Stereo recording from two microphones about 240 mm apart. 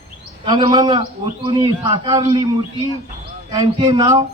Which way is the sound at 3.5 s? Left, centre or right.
Centre.